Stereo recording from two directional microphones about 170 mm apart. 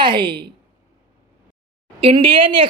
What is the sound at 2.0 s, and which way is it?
Speech, 30° right (ahead or behind).